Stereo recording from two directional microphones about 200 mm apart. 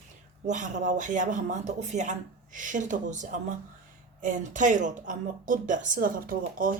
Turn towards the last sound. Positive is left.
turn(degrees=-45)  # may be behind; listen again after turning